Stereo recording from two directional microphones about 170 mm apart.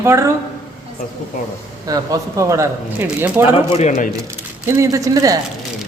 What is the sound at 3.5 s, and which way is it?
Speech, 35° left (ahead or behind).